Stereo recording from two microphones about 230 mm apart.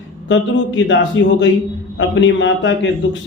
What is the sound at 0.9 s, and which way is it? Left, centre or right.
A man's voice, left.